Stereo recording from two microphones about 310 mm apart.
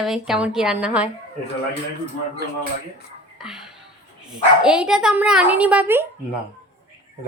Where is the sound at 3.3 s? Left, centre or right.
Centre.